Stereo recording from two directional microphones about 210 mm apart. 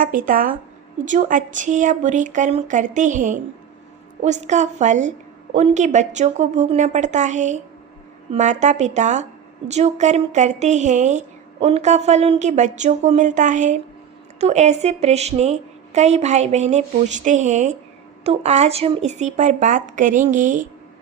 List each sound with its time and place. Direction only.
0.0 s a woman's voice: 40° right (ahead or behind)